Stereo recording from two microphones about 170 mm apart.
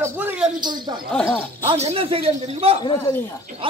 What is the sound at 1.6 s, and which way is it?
Speech, 35° right (ahead or behind).